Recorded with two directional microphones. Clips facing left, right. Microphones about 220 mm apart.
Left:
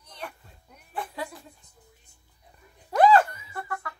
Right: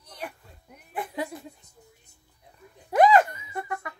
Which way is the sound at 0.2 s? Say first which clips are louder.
Right 2 dB; 15° right (ahead or behind).